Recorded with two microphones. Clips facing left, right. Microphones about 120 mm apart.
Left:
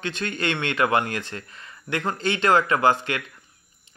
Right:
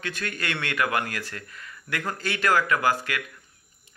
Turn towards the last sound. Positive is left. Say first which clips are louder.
# left 4 dB
turn(degrees=25)  # may be behind; listen again after turning